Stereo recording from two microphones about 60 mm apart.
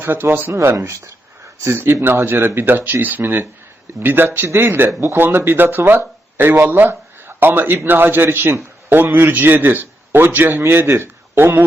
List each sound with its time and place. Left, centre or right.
0.0 s a man's voice: right
0.6 s speech: right
1.6 s a man's voice: right